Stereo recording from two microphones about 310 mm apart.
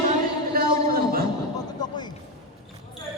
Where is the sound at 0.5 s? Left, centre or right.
Right.